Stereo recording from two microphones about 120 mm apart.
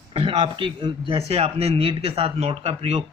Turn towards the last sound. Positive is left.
turn(degrees=-65)  # may be behind; listen again after turning